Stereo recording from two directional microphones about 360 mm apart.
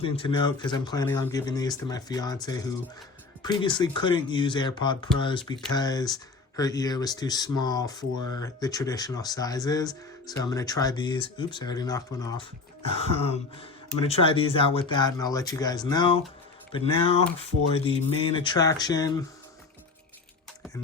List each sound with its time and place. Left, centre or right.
0.0 s speech: centre
17.7 s speech: centre